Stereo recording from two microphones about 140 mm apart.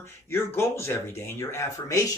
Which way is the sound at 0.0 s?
20° left (ahead or behind).